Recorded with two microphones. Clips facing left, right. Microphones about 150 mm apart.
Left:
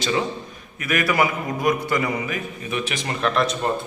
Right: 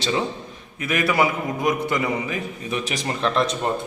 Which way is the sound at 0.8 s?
25° right (ahead or behind).